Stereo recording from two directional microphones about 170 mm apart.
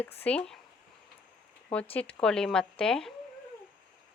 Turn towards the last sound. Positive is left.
turn(degrees=5)  # may be behind; listen again after turning